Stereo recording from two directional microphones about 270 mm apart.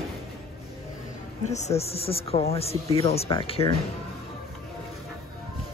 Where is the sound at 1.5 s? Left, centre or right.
Left.